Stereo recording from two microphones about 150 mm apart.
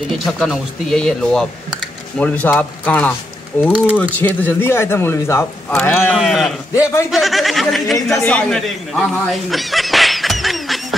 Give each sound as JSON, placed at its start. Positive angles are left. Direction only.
{"t": 0.4, "sound": "speech", "side_deg": 5}
{"t": 6.1, "sound": "speech", "side_deg": 0}
{"t": 6.7, "sound": "a man's voice", "side_deg": 20}
{"t": 7.1, "sound": "speech", "side_deg": 0}